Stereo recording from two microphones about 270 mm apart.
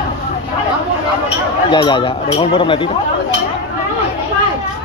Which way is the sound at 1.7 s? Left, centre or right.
Centre.